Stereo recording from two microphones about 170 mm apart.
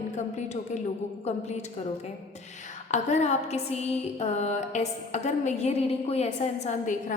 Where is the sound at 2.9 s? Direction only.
40° left (ahead or behind).